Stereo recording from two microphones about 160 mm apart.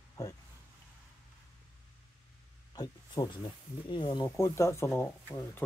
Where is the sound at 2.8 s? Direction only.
25° left (ahead or behind).